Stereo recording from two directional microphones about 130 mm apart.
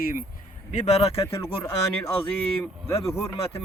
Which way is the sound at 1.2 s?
20° left (ahead or behind).